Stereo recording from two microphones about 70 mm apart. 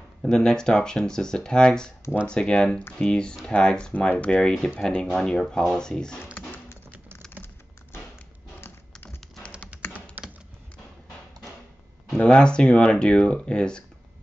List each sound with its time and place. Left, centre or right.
0.2 s speech: centre
6.3 s dog: left
10.2 s typing: right
12.2 s speech: centre